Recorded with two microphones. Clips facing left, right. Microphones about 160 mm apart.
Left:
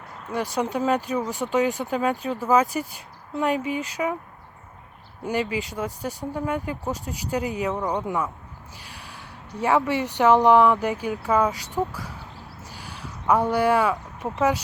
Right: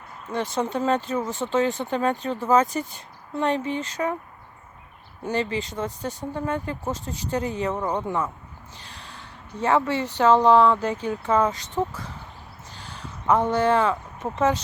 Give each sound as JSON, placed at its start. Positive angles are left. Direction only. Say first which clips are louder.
{"t": 0.3, "sound": "speech", "louder": "even", "side_deg": 10}
{"t": 5.2, "sound": "speech", "louder": "even", "side_deg": 10}
{"t": 12.7, "sound": "a sound", "louder": "even", "side_deg": 10}
{"t": 14.3, "sound": "speech", "louder": "even", "side_deg": 10}